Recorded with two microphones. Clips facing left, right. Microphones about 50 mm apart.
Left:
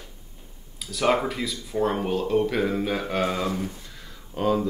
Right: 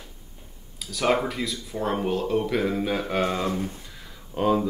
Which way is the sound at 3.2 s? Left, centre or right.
Centre.